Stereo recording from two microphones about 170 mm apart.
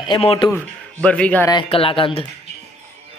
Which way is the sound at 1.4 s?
30° left (ahead or behind).